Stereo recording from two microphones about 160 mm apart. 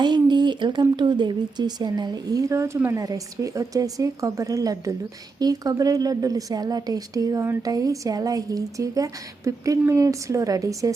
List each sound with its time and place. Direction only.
0.0 s a woman's voice: 30° right (ahead or behind)